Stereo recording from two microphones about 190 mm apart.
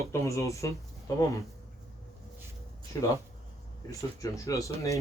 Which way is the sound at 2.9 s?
15° left (ahead or behind).